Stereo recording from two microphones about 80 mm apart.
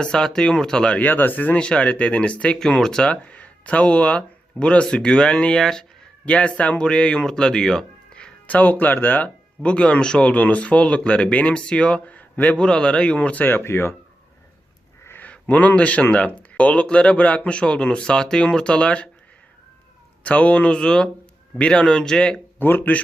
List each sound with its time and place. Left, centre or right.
0.0 s speech: centre
1.0 s speech: left
15.0 s speech: left
20.2 s speech: centre
22.5 s speech: left